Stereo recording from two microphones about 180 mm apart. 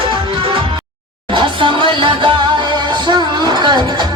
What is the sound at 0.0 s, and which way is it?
Music, 30° right (ahead or behind).